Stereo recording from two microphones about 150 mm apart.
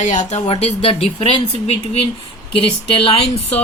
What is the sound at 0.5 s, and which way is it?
Speech, 40° left (ahead or behind).